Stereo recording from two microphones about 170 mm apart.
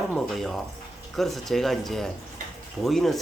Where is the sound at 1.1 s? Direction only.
Centre (ahead or behind).